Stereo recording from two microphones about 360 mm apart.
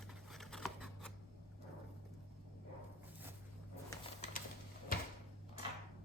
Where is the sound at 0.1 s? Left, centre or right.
Centre.